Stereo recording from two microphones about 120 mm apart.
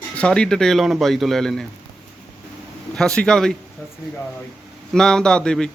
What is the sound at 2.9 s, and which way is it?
Speech, 5° left (ahead or behind).